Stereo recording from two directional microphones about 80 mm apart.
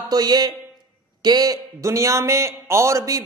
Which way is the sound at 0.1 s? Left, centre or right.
Right.